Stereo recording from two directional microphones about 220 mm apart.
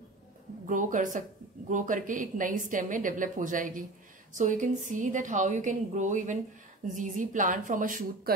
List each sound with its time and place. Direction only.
0.7 s a woman's voice: 35° right (ahead or behind)